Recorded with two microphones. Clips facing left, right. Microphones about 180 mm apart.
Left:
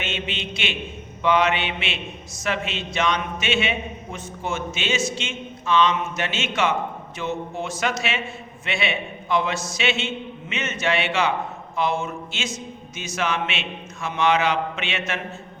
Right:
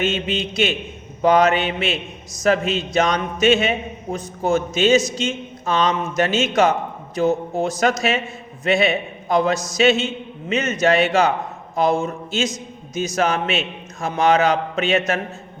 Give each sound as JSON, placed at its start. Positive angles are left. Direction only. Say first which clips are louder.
{"t": 0.0, "sound": "a man's voice", "louder": "right 8 dB", "side_deg": -40}